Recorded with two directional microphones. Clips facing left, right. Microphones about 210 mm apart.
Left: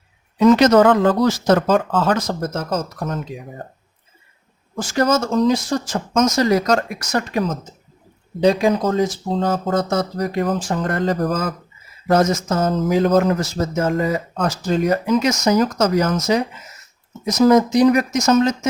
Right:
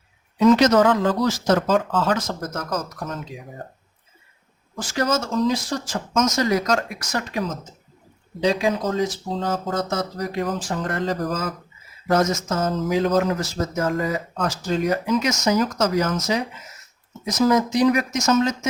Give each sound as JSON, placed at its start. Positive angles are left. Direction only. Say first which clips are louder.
{"t": 0.3, "sound": "speech", "louder": "left 3 dB", "side_deg": 55}
{"t": 2.1, "sound": "speech", "louder": "left 5 dB", "side_deg": 35}
{"t": 4.8, "sound": "speech", "louder": "left 5 dB", "side_deg": 50}
{"t": 5.9, "sound": "speech", "louder": "left 3 dB", "side_deg": 30}
{"t": 8.4, "sound": "speech", "louder": "left 5 dB", "side_deg": 55}
{"t": 12.1, "sound": "speech", "louder": "left 4 dB", "side_deg": 35}
{"t": 12.6, "sound": "speech", "louder": "left 4 dB", "side_deg": 50}
{"t": 13.6, "sound": "speech", "louder": "left 4 dB", "side_deg": 25}
{"t": 14.3, "sound": "speech", "louder": "left 4 dB", "side_deg": 45}
{"t": 15.2, "sound": "speech", "louder": "left 4 dB", "side_deg": 35}